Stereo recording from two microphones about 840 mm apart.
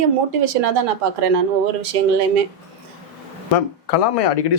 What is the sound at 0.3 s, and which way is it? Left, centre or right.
Speech, right.